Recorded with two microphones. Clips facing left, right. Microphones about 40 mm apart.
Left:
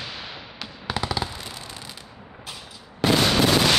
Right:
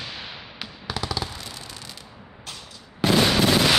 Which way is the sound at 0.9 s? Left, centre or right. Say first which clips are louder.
Left 2 dB; left.